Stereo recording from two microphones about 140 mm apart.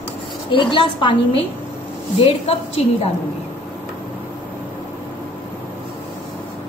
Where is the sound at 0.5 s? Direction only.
35° left (ahead or behind).